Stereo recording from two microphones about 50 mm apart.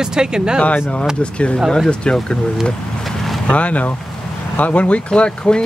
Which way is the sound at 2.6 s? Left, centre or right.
Centre.